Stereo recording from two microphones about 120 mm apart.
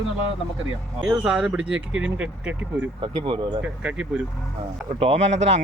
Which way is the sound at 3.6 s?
10° right (ahead or behind).